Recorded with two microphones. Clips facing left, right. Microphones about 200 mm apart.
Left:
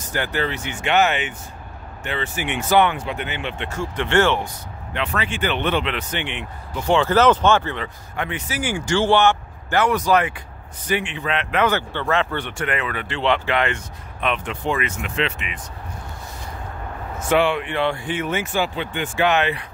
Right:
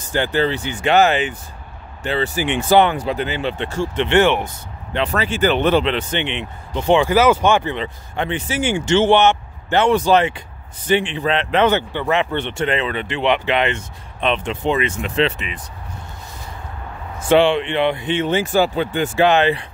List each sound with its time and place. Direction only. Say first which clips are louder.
0.1 s speech: right 6 dB; 30° right (ahead or behind)
4.9 s speech: right 5 dB; 35° right (ahead or behind)
11.9 s speech: right 3 dB; 15° right (ahead or behind); by 15.6 s 35° right (ahead or behind)
17.3 s speech: right 5 dB; 25° right (ahead or behind)